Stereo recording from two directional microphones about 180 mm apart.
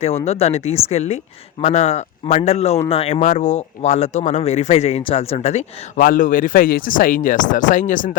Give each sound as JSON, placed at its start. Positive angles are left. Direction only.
{"t": 0.3, "sound": "speech", "side_deg": 35}
{"t": 6.0, "sound": "speech", "side_deg": 50}